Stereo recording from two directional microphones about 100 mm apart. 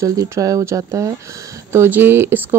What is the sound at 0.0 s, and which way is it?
Speech, 35° right (ahead or behind).